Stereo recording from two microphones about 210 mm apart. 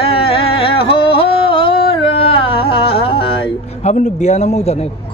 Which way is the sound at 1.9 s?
25° left (ahead or behind).